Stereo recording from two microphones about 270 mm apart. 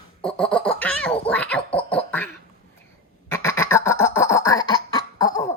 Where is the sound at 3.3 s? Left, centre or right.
Centre.